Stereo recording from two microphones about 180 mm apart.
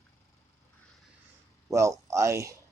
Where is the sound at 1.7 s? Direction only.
15° right (ahead or behind).